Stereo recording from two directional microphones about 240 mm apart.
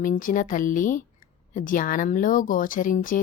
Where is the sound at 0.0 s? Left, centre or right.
Left.